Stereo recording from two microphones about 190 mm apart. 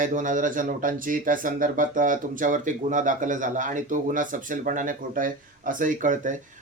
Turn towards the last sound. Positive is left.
turn(degrees=-45)  # may be behind; listen again after turning